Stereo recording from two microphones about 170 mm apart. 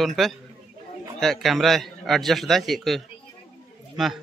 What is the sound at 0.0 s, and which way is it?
A man's voice, centre (ahead or behind).